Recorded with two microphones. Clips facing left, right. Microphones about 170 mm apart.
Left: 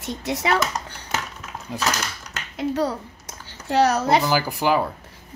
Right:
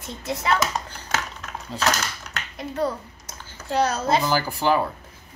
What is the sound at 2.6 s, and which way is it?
A child's voice, 80° left.